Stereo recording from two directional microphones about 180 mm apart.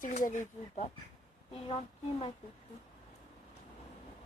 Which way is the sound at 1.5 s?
30° left (ahead or behind).